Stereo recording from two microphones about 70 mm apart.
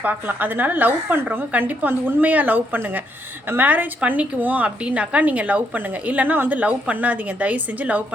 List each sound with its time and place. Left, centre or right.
0.0 s a woman's voice: right